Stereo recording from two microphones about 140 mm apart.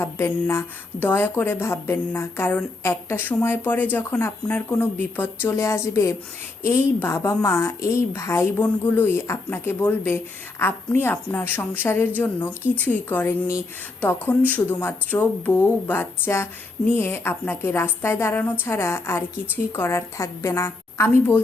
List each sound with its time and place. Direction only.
0.0 s a woman's voice: 20° left (ahead or behind)